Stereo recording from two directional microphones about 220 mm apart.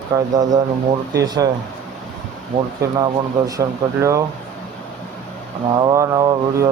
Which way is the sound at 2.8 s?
15° right (ahead or behind).